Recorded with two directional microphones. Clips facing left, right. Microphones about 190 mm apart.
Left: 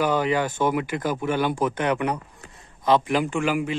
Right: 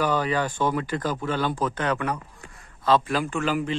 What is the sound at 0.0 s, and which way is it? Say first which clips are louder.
Speech: left 2 dB; 15° left (ahead or behind).